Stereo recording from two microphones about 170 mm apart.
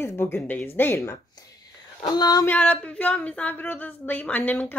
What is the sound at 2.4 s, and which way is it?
Speech, 10° left (ahead or behind).